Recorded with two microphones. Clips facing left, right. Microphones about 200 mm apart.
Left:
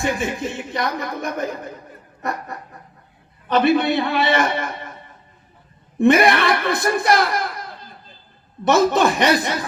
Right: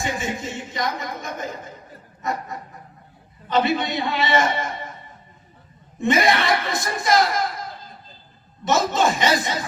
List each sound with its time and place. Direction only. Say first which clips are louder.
0.0 s speech: left 4 dB; 60° left (ahead or behind)
3.5 s speech: left 5 dB; 60° left (ahead or behind)
6.0 s speech: left 5 dB; 60° left (ahead or behind)
8.6 s speech: left 4 dB; 60° left (ahead or behind)